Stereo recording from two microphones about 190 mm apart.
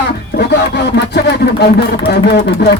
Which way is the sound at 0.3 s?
60° left (ahead or behind).